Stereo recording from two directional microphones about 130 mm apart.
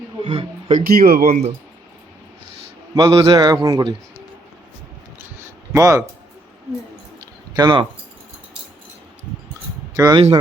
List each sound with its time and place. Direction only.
0.2 s a man's voice: 40° right (ahead or behind)
0.7 s speech: 90° right
2.9 s a man's voice: 30° right (ahead or behind)
5.7 s speech: 25° right (ahead or behind)
7.5 s a man's voice: 35° right (ahead or behind)
9.9 s speech: 25° right (ahead or behind)